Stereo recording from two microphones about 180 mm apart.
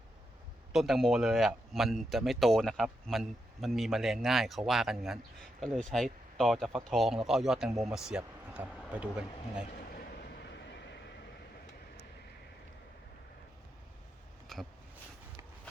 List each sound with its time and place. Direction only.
0.7 s a man's voice: centre (ahead or behind)
10.0 s vehicle: 65° left (ahead or behind)
14.4 s a sound: centre (ahead or behind)